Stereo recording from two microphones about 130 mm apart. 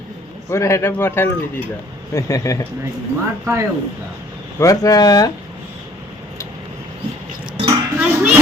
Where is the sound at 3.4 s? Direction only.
20° right (ahead or behind).